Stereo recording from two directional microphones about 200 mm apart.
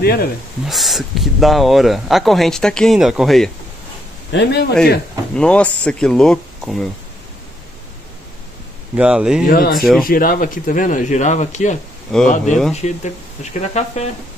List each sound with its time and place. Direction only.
0.0 s speech: 50° left (ahead or behind)
0.7 s speech: centre (ahead or behind)
4.3 s speech: 60° left (ahead or behind)
5.3 s speech: 5° left (ahead or behind)
8.9 s speech: 5° right (ahead or behind)
9.5 s speech: 45° left (ahead or behind)
12.1 s speech: centre (ahead or behind)
12.7 s speech: 35° left (ahead or behind)